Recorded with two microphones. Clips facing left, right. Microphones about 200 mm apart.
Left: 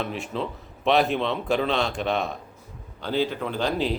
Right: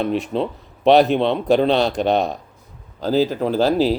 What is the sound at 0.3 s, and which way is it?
Speech, 35° right (ahead or behind).